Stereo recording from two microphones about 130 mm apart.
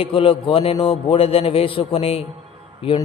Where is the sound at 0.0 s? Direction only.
45° left (ahead or behind).